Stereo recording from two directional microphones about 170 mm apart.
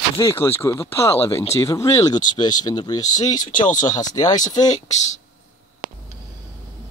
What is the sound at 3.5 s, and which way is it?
Speech, 50° left (ahead or behind).